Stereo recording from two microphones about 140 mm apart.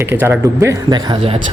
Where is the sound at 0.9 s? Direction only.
35° right (ahead or behind).